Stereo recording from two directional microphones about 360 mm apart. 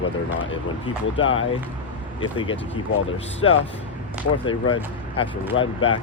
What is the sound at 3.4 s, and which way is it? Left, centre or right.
Speech, left.